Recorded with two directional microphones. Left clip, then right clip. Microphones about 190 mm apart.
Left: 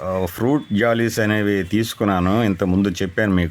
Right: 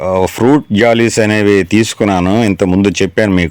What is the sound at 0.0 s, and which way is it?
Speech, 25° right (ahead or behind).